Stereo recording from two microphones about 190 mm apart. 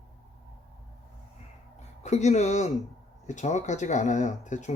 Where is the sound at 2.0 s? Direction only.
35° left (ahead or behind).